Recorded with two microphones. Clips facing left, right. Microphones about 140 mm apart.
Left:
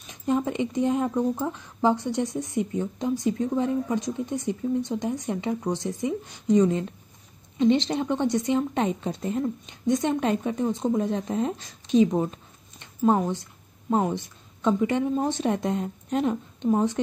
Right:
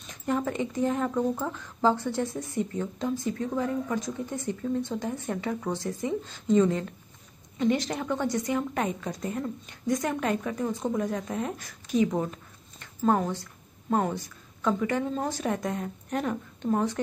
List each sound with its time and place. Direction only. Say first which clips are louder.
0.0 s a woman's voice: left 3 dB; 15° left (ahead or behind)